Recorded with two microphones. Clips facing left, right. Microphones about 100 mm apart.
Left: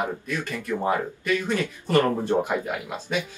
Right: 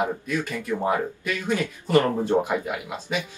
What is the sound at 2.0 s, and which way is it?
Speech, 15° right (ahead or behind).